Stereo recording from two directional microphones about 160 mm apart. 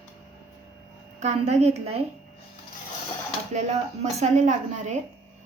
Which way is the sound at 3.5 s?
45° right (ahead or behind).